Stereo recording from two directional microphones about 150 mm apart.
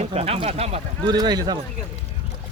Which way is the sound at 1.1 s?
25° right (ahead or behind).